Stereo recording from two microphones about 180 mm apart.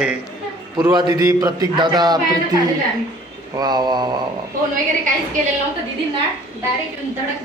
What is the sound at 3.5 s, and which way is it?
Speech, 25° right (ahead or behind).